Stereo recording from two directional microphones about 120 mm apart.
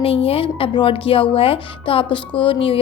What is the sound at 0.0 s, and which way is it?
Speech, 50° left (ahead or behind).